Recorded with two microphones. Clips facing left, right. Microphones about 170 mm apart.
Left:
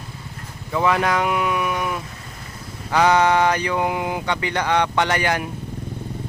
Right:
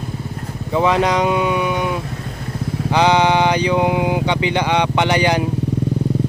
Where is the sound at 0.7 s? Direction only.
20° right (ahead or behind).